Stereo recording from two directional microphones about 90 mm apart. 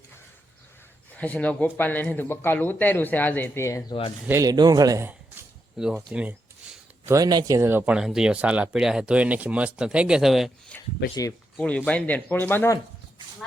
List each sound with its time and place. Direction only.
1.1 s speech: 15° left (ahead or behind)
3.6 s speech: 35° left (ahead or behind)
4.4 s speech: 45° right (ahead or behind)
5.7 s speech: 5° right (ahead or behind)
6.6 s a sound: 10° right (ahead or behind)
7.0 s speech: 40° right (ahead or behind)
7.7 s speech: 20° right (ahead or behind)
7.9 s speech: 10° right (ahead or behind)
11.9 s speech: 15° left (ahead or behind)